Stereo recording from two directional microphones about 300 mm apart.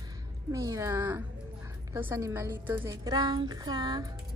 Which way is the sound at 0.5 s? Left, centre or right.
Centre.